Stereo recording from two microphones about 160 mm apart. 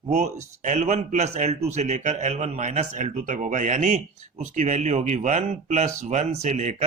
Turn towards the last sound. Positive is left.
turn(degrees=-45)  # may be behind; listen again after turning